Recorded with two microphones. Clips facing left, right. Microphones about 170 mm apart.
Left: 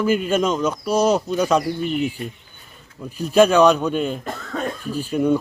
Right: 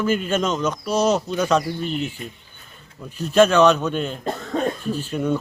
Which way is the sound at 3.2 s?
10° left (ahead or behind).